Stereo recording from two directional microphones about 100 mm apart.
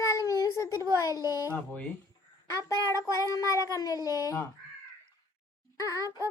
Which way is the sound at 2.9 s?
35° left (ahead or behind).